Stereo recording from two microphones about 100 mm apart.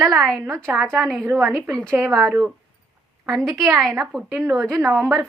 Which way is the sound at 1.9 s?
35° right (ahead or behind).